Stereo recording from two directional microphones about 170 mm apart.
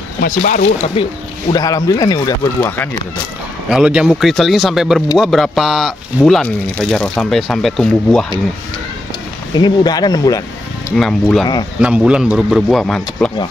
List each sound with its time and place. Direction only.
0.2 s speech: 55° left (ahead or behind)
1.0 s speech: 35° left (ahead or behind)
1.5 s speech: 20° left (ahead or behind)
2.6 s speech: 10° left (ahead or behind)
3.6 s speech: 5° right (ahead or behind)
9.5 s speech: 25° left (ahead or behind)
11.0 s speech: 5° left (ahead or behind)